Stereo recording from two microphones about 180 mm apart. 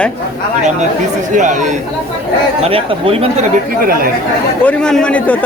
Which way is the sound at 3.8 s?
55° right (ahead or behind).